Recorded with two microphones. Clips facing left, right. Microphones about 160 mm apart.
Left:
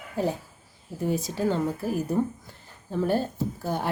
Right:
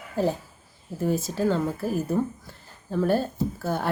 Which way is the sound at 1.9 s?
15° left (ahead or behind).